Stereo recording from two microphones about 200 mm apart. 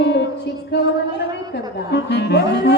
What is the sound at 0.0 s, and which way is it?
Music, 60° left (ahead or behind).